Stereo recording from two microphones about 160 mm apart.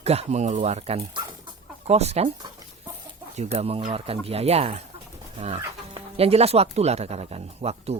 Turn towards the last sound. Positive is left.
turn(degrees=-40)  # may be behind; listen again after turning